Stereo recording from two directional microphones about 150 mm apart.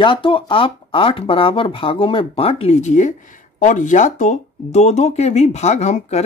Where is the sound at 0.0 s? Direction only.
35° left (ahead or behind).